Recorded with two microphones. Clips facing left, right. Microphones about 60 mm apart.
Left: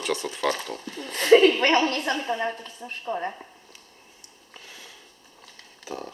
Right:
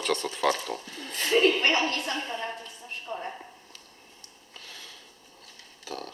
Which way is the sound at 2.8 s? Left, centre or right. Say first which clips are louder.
Left 6 dB; left.